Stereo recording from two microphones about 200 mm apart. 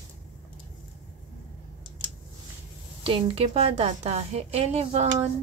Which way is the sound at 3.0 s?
30° right (ahead or behind).